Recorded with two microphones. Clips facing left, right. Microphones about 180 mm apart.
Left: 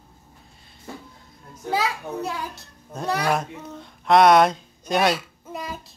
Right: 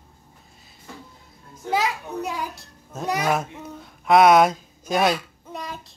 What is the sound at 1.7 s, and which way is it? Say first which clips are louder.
A child's voice: right 1 dB; 15° right (ahead or behind).